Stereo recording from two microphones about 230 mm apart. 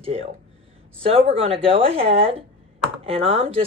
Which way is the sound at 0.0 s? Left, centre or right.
Right.